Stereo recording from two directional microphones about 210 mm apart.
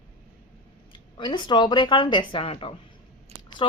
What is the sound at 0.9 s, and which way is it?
Speech, 20° left (ahead or behind).